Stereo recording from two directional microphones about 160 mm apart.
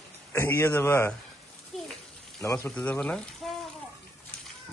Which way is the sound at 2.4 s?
20° left (ahead or behind).